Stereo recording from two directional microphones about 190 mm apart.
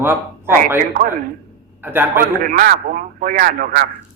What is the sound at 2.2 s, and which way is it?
Speech, 50° right (ahead or behind).